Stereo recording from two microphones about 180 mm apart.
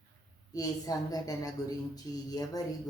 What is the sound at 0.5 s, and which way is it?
Speech, 20° left (ahead or behind).